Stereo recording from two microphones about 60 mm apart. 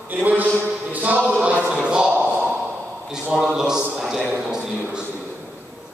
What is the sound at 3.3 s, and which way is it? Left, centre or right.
A man's voice, centre.